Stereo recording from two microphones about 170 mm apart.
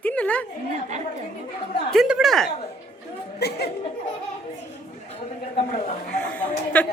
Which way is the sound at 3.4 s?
70° left (ahead or behind).